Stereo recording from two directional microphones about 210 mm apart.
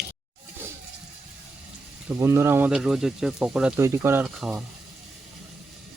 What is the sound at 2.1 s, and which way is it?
Speech, 10° right (ahead or behind).